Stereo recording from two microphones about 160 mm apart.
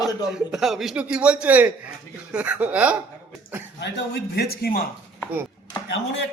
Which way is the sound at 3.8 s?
90° left.